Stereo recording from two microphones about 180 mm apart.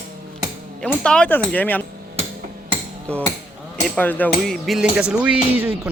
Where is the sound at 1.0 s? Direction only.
5° left (ahead or behind).